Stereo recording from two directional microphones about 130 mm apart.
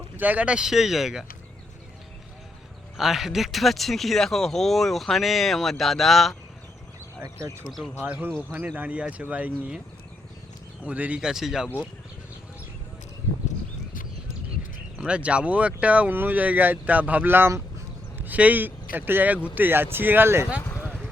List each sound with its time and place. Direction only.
0.2 s speech: 10° right (ahead or behind)
3.0 s speech: 5° right (ahead or behind)
7.2 s speech: 20° right (ahead or behind)
8.0 s speech: 10° right (ahead or behind)
10.8 s speech: 10° right (ahead or behind)
14.9 s speech: 10° right (ahead or behind)